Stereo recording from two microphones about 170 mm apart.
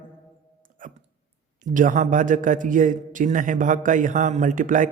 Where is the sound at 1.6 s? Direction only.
50° right (ahead or behind).